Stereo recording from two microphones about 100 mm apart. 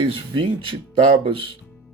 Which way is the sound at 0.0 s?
60° right (ahead or behind).